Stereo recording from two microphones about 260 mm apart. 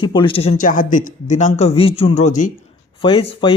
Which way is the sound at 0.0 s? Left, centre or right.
Centre.